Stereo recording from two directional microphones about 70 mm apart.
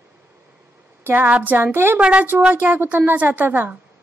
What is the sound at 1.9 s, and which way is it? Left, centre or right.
A woman's voice, centre.